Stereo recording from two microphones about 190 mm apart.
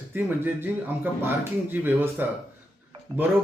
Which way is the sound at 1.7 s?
10° right (ahead or behind).